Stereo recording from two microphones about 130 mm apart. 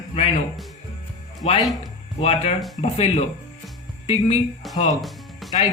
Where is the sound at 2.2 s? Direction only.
50° left (ahead or behind).